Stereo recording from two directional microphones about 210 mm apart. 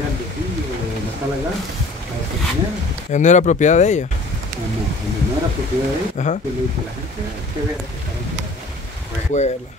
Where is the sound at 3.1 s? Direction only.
35° left (ahead or behind).